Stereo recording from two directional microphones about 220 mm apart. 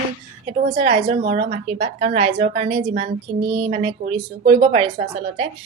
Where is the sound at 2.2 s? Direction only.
25° right (ahead or behind).